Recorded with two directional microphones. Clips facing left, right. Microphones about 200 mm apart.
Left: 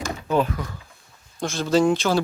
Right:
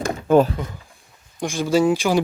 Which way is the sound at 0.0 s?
50° right (ahead or behind).